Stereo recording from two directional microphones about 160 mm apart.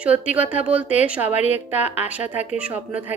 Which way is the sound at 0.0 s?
10° right (ahead or behind).